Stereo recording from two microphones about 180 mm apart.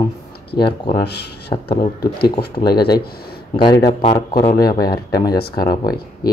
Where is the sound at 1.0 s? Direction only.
65° left (ahead or behind).